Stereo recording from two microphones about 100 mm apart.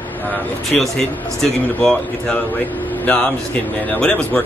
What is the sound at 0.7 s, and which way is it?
Speech, 5° left (ahead or behind).